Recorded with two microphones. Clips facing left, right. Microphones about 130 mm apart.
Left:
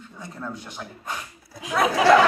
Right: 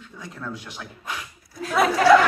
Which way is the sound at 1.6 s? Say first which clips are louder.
Right 2 dB; 15° left (ahead or behind).